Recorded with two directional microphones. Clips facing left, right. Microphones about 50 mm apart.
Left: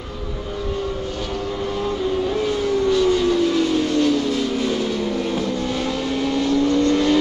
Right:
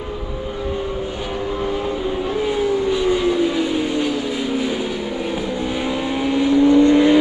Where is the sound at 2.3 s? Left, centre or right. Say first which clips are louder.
Right 1 dB; centre.